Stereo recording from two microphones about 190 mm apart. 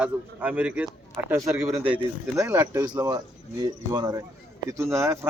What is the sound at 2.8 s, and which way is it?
Speech, 20° right (ahead or behind).